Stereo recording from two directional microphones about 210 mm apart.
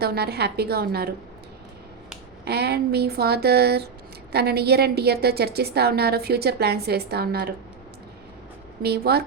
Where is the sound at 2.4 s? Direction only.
50° right (ahead or behind).